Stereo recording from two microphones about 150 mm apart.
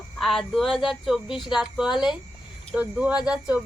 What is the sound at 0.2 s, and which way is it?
A woman's voice, centre (ahead or behind).